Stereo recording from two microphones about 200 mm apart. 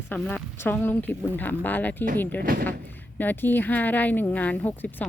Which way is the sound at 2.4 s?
45° right (ahead or behind).